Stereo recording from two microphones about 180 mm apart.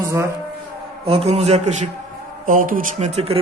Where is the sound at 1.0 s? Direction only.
35° right (ahead or behind).